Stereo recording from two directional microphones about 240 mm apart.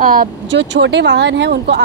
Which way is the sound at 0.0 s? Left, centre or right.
Right.